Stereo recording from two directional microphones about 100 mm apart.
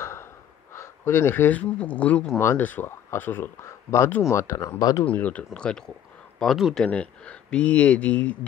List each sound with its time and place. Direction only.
0.0 s snort: 25° left (ahead or behind)
0.7 s speech: 25° left (ahead or behind)
5.0 s speech: 15° left (ahead or behind)